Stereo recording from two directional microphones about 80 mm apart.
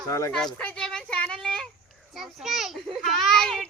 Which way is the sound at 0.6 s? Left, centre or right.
Centre.